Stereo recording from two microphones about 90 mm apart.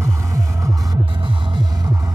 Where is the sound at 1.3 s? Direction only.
55° right (ahead or behind).